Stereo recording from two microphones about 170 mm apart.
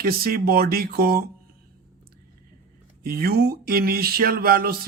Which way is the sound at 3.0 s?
65° right (ahead or behind).